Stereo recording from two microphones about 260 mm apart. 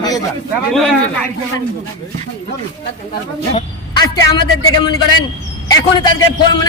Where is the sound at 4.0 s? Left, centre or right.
Centre.